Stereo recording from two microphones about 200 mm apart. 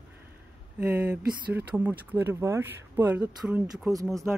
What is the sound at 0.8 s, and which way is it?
Speech, 5° right (ahead or behind).